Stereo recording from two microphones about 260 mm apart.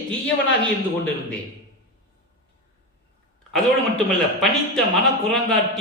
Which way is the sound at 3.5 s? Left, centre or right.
Centre.